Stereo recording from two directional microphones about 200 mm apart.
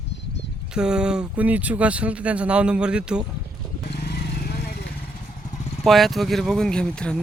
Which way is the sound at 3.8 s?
55° left (ahead or behind).